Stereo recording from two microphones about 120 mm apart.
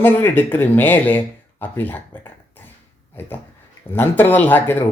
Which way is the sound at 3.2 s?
15° left (ahead or behind).